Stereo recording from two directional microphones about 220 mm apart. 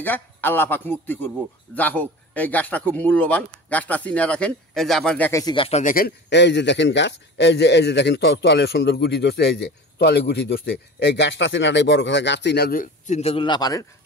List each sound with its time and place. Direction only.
0.0 s speech: 10° left (ahead or behind)